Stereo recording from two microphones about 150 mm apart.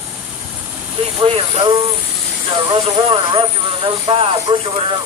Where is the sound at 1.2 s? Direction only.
40° right (ahead or behind).